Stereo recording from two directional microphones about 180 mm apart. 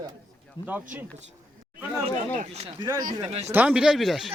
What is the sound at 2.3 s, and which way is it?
Speech, 35° right (ahead or behind).